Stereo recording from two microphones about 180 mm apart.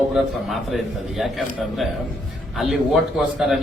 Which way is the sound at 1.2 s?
Centre (ahead or behind).